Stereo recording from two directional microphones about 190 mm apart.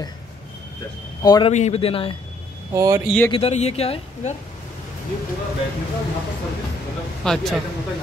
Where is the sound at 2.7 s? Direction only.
20° right (ahead or behind).